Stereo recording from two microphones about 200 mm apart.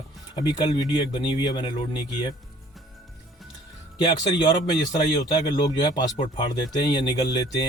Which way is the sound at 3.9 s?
25° left (ahead or behind).